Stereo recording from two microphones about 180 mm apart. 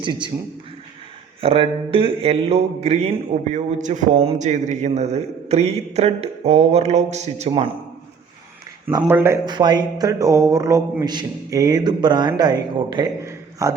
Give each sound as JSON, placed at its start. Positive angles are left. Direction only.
{"t": 0.0, "sound": "a man's voice", "side_deg": -25}
{"t": 1.4, "sound": "speech", "side_deg": -30}
{"t": 8.9, "sound": "speech", "side_deg": -20}